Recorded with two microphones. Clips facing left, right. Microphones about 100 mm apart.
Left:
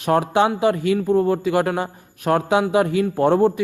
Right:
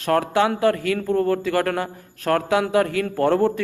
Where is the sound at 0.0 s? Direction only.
20° left (ahead or behind).